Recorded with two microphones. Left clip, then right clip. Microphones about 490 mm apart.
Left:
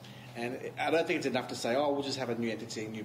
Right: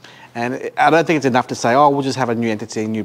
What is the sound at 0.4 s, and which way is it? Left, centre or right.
Speech, right.